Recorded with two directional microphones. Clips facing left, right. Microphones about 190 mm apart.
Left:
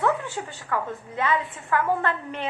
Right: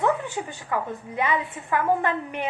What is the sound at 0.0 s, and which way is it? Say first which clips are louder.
A woman's voice: right 1 dB; 15° right (ahead or behind).